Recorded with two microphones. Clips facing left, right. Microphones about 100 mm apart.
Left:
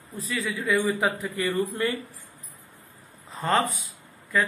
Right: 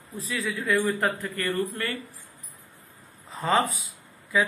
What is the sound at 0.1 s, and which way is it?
Speech, centre (ahead or behind).